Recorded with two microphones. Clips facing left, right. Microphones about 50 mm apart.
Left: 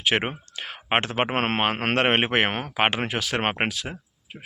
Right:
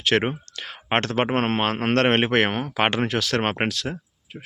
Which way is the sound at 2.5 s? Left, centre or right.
Left.